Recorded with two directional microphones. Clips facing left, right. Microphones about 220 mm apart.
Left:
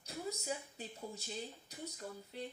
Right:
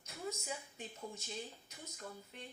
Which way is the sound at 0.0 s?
35° left (ahead or behind).